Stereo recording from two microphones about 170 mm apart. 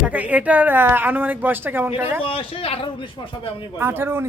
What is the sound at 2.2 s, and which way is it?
Speech, 35° left (ahead or behind).